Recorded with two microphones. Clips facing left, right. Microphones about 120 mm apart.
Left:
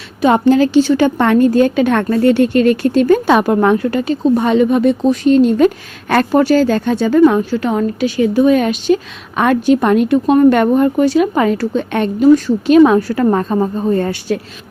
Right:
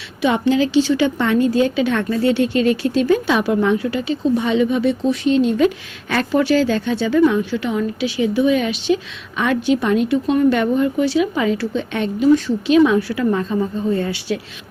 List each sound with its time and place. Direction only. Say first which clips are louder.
0.2 s a woman's voice: left 6 dB; 45° left (ahead or behind)